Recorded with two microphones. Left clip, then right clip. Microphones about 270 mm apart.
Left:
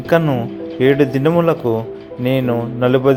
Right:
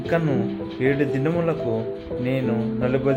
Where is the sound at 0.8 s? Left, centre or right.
Centre.